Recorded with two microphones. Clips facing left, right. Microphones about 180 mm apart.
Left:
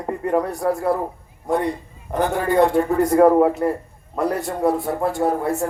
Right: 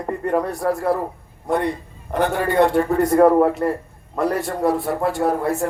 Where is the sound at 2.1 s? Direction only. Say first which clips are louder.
Right 1 dB; 65° right (ahead or behind).